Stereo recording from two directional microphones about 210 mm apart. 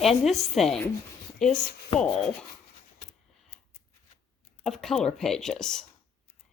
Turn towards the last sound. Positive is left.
turn(degrees=0)  # may be behind; listen again after turning